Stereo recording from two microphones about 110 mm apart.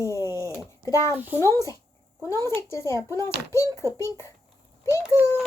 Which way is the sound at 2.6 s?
25° left (ahead or behind).